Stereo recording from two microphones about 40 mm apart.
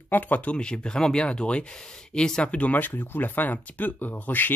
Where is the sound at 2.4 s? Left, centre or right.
Left.